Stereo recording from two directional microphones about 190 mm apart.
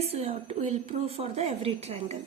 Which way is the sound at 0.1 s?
35° right (ahead or behind).